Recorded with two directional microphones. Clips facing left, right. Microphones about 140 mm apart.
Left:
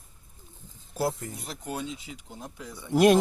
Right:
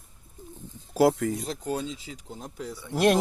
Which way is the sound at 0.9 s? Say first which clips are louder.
Right 8 dB; 90° right.